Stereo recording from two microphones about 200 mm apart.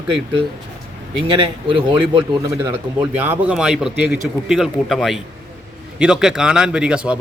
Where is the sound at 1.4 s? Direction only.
25° right (ahead or behind).